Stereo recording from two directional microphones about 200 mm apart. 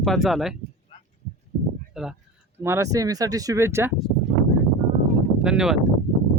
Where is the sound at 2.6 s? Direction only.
15° right (ahead or behind).